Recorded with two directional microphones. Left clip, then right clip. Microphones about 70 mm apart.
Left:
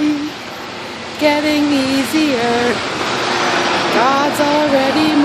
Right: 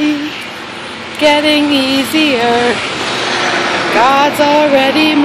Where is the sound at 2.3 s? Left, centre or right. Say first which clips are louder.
Right 5 dB; centre.